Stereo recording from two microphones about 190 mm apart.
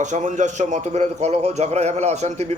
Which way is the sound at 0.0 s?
40° right (ahead or behind).